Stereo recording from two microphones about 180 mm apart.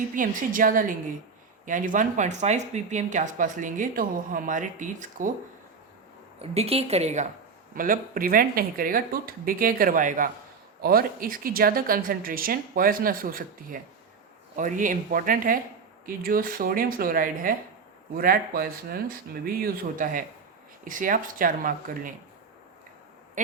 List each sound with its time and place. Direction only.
0.1 s speech: 50° right (ahead or behind)
6.4 s a woman's voice: 35° right (ahead or behind)
7.8 s speech: 50° right (ahead or behind)